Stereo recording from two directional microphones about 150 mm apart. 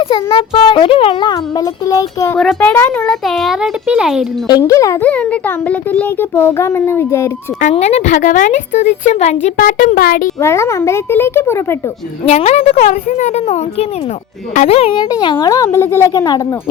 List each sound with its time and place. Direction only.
0.0 s a child's voice: 30° left (ahead or behind)
2.6 s a child's voice: 10° left (ahead or behind); by 4.3 s 5° right (ahead or behind)
4.4 s a child's voice: 25° left (ahead or behind)
5.0 s a child's voice: 10° left (ahead or behind)
7.6 s speech: 45° left (ahead or behind); by 10.3 s 70° left (ahead or behind)
10.4 s a child's voice: 20° left (ahead or behind)
12.2 s speech: 45° left (ahead or behind)
12.9 s speech: 55° left (ahead or behind)
15.1 s a child's voice: 30° left (ahead or behind)
16.1 s a child's voice: 30° left (ahead or behind)